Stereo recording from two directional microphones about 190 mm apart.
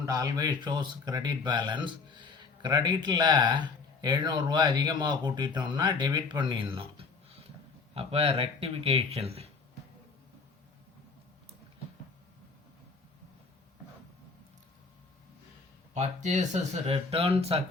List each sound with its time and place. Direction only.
0.0 s speech: 20° right (ahead or behind)
16.0 s speech: 40° right (ahead or behind)